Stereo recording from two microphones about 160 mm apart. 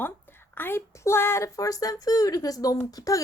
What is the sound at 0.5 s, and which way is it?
A woman's voice, 15° left (ahead or behind).